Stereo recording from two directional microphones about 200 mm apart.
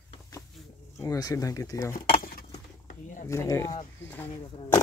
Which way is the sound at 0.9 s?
20° left (ahead or behind).